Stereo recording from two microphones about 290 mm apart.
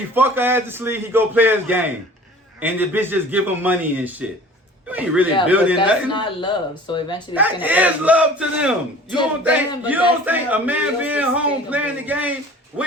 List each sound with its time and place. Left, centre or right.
0.1 s a man's voice: centre
5.7 s speech: centre
7.3 s speech: centre